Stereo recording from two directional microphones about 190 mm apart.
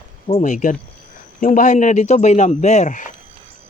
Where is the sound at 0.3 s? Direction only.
40° left (ahead or behind).